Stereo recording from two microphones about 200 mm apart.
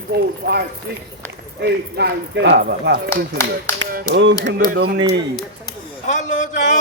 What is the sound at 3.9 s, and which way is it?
Speech, 60° right (ahead or behind).